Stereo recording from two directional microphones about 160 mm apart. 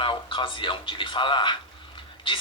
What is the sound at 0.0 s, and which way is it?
A man's voice, 30° left (ahead or behind).